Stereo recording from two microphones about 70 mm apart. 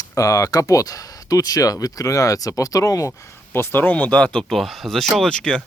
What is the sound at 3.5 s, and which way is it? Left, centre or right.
Speech, left.